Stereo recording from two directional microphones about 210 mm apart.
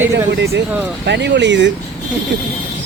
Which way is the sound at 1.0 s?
55° right (ahead or behind).